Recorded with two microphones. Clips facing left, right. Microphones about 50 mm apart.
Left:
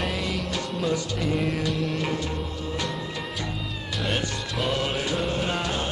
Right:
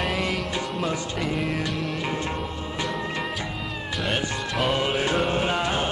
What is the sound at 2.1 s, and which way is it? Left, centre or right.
Music, right.